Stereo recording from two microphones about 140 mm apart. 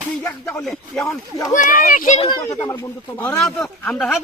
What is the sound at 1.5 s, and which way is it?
Speech, 70° left (ahead or behind).